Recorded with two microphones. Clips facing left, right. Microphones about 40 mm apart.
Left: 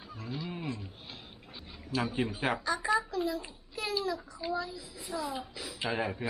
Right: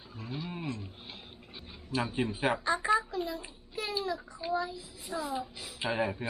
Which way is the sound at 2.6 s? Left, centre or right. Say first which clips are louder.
Right 2 dB; right.